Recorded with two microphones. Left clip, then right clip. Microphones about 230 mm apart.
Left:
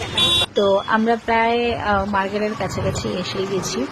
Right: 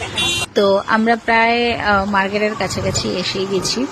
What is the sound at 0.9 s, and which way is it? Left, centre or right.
Speech, right.